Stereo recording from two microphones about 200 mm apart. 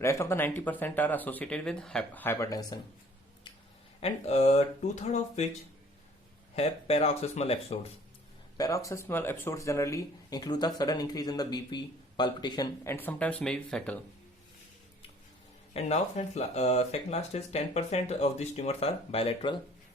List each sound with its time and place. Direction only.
0.0 s speech: 15° left (ahead or behind)
4.0 s speech: 30° left (ahead or behind)
6.6 s speech: 30° left (ahead or behind)
8.5 s speech: 15° left (ahead or behind)
15.7 s speech: 35° left (ahead or behind)